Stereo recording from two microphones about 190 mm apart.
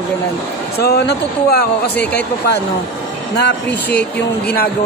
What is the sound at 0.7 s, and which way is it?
Speech, 55° left (ahead or behind).